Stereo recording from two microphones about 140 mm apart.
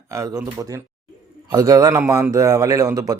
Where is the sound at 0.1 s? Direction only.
20° right (ahead or behind).